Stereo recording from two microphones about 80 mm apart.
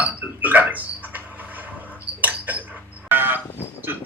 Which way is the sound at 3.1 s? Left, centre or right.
Right.